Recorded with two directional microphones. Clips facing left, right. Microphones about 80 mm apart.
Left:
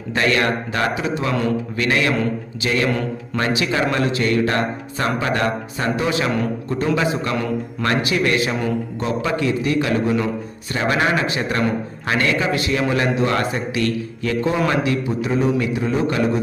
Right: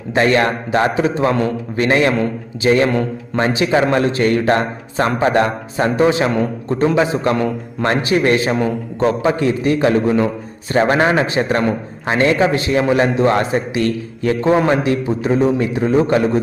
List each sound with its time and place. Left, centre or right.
0.1 s a man's voice: right
8.5 s a man's voice: right
9.2 s a man's voice: right